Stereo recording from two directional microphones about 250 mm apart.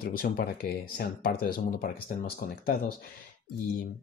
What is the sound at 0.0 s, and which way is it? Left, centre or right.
Speech, left.